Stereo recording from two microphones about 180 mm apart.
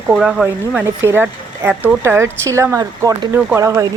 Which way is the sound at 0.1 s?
5° right (ahead or behind).